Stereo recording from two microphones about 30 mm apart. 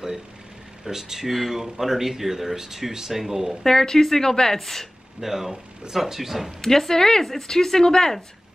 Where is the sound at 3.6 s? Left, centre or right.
Centre.